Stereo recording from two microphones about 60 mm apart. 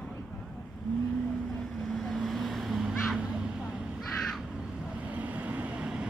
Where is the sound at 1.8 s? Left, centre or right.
Centre.